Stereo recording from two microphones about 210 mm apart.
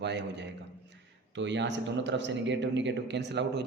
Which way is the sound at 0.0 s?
55° right (ahead or behind).